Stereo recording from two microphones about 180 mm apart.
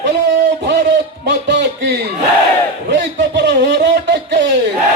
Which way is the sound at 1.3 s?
75° right (ahead or behind).